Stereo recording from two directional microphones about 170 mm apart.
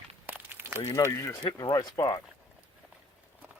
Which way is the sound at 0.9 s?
20° left (ahead or behind).